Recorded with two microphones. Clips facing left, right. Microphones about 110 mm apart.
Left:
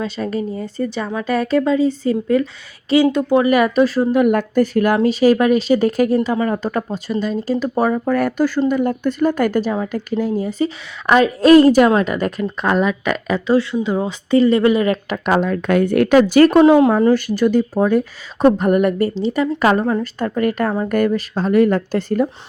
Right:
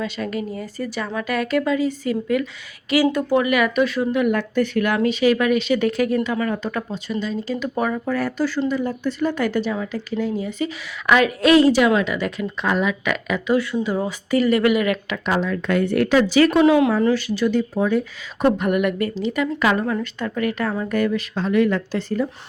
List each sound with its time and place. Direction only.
0.0 s a woman's voice: 30° left (ahead or behind)
3.4 s speech: 35° left (ahead or behind)
7.5 s speech: 35° left (ahead or behind)
11.5 s a woman's voice: 45° left (ahead or behind)
15.2 s speech: 50° left (ahead or behind)